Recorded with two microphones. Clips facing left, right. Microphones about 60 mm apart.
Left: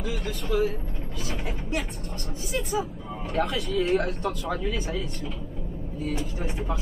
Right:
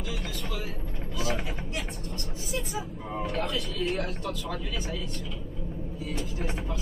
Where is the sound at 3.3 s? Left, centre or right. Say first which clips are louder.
Left 9 dB; left.